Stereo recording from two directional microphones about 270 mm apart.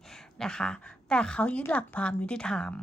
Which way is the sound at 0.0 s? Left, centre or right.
Centre.